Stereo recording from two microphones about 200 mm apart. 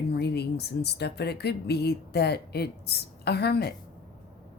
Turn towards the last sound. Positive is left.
turn(degrees=55)  # may be behind; listen again after turning